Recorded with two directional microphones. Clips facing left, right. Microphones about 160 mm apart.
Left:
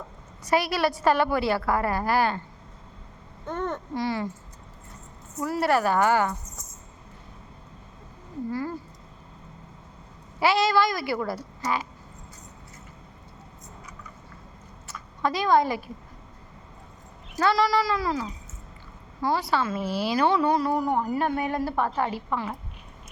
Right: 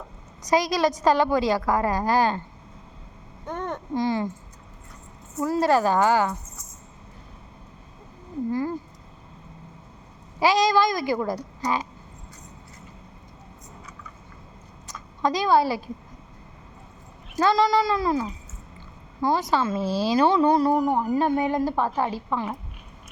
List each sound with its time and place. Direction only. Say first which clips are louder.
0.5 s a woman's voice: right 2 dB; 15° right (ahead or behind)
3.4 s speech: left 1 dB; 15° right (ahead or behind)
5.4 s a woman's voice: right 3 dB; 20° right (ahead or behind)
8.4 s cat: right 4 dB; 20° right (ahead or behind)
10.4 s a woman's voice: right 2 dB; 15° right (ahead or behind)
15.2 s a woman's voice: right 1 dB; 15° right (ahead or behind)
17.3 s speech: right 2 dB; 20° right (ahead or behind)
19.8 s a woman's voice: right 3 dB; 15° left (ahead or behind)
20.3 s speech: right 4 dB; 25° right (ahead or behind)
20.9 s a woman's voice: right 3 dB; 10° right (ahead or behind)